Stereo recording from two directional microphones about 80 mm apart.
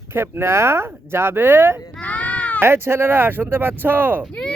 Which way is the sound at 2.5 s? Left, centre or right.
Right.